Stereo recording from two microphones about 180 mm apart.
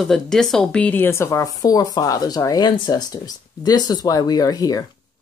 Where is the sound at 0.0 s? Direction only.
Centre (ahead or behind); by 4.8 s 20° left (ahead or behind).